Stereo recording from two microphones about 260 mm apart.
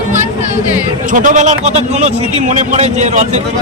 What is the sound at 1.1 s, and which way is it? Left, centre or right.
A man's voice, right.